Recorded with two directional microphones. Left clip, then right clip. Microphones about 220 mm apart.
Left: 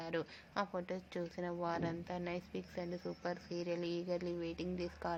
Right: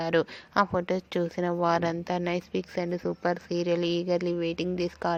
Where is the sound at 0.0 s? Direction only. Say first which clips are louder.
Right 15 dB; 35° right (ahead or behind).